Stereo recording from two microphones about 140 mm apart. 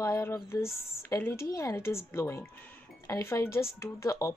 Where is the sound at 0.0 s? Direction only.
20° left (ahead or behind).